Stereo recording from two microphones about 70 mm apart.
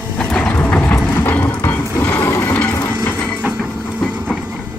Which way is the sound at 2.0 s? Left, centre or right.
Left.